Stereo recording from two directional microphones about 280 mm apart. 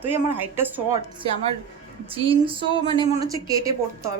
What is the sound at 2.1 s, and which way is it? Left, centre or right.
A woman's voice, centre.